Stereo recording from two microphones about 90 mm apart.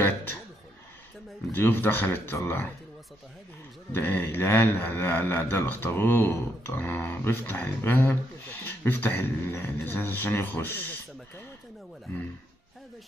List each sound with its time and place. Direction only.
1.5 s a man's voice: 20° left (ahead or behind)
3.9 s a man's voice: 25° left (ahead or behind)